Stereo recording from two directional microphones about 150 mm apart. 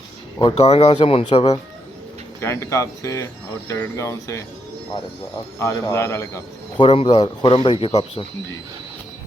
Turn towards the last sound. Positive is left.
turn(degrees=35)  # may be behind; listen again after turning